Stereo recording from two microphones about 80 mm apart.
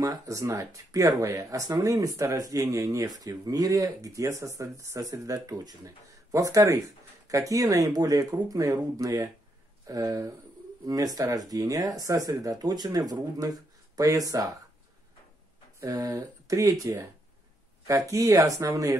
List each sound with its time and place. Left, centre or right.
0.0 s speech: right
15.8 s speech: right